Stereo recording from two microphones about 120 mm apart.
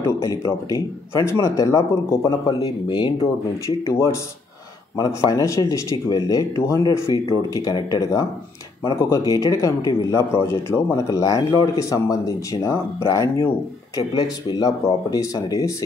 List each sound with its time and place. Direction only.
0.0 s a man's voice: 30° left (ahead or behind)